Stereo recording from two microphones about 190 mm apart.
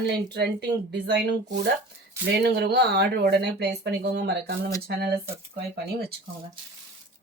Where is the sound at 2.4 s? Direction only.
60° right (ahead or behind).